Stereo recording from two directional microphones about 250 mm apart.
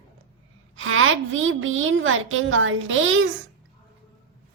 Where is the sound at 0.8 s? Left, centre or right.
Right.